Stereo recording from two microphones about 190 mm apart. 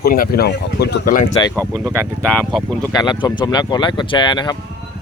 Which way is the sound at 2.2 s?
5° left (ahead or behind).